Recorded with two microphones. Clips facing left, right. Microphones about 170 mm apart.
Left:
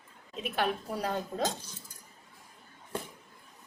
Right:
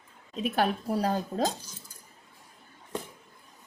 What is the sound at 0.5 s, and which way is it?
Speech, 40° right (ahead or behind).